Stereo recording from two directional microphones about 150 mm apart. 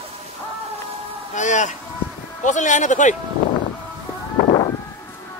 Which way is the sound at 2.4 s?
55° left (ahead or behind).